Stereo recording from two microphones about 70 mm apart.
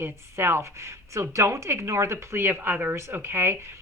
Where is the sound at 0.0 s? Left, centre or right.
Right.